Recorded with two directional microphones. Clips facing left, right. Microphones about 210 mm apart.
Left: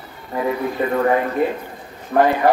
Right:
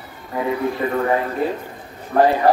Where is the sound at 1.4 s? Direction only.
35° right (ahead or behind).